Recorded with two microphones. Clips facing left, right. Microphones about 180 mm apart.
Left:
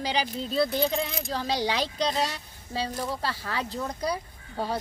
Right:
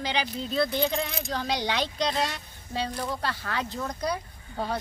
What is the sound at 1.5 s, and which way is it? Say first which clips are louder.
A woman's voice: left 2 dB; 35° left (ahead or behind).